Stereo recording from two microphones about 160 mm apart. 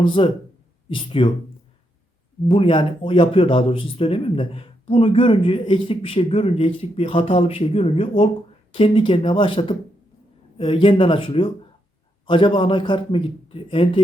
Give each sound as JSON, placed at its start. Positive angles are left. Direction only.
{"t": 0.0, "sound": "speech", "side_deg": 30}
{"t": 2.5, "sound": "speech", "side_deg": 35}